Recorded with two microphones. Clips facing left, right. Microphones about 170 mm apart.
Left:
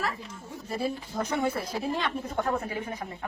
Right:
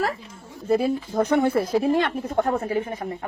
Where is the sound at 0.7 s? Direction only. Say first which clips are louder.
Right 10 dB; 60° right (ahead or behind).